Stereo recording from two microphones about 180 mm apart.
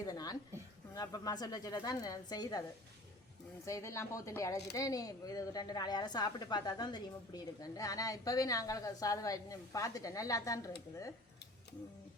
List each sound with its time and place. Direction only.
0.0 s a sound: 20° left (ahead or behind)
0.9 s speech: 20° left (ahead or behind)
3.7 s speech: 15° left (ahead or behind)